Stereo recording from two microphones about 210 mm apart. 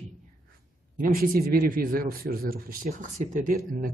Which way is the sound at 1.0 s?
40° right (ahead or behind).